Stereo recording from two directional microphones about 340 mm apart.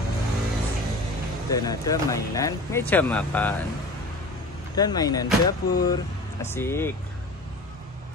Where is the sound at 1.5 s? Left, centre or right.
Centre.